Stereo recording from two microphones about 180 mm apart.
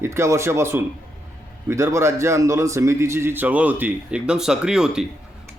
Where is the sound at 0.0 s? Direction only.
15° right (ahead or behind).